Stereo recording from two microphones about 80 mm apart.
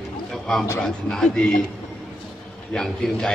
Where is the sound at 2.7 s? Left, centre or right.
Centre.